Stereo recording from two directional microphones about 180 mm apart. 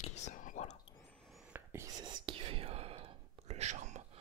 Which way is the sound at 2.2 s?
30° right (ahead or behind).